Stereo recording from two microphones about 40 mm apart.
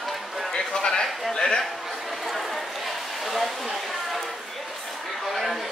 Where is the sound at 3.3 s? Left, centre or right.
Centre.